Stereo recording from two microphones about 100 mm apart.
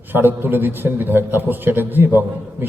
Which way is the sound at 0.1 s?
20° right (ahead or behind).